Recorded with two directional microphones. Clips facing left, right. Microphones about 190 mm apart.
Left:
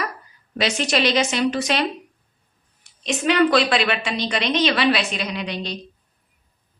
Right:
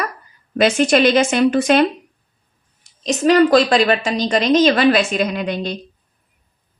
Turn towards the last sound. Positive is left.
turn(degrees=-50)  # may be behind; listen again after turning